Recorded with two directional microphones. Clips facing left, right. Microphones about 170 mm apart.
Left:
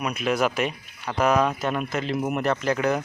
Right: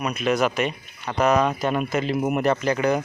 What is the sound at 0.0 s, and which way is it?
Speech, 5° left (ahead or behind).